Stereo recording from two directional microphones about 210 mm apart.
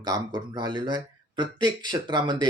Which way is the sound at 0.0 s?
20° right (ahead or behind).